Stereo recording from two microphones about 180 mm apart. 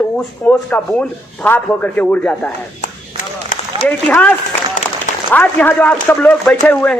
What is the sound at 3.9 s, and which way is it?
Speech, 10° left (ahead or behind).